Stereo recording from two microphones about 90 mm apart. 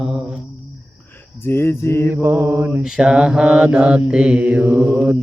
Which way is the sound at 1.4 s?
25° left (ahead or behind).